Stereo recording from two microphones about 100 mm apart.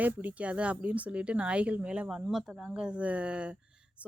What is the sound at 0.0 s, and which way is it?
Speech, 15° right (ahead or behind).